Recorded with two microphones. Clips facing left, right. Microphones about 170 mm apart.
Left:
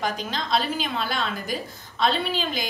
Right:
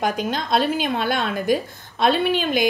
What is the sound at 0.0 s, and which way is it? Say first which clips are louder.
A woman's voice: right 5 dB; 55° right (ahead or behind).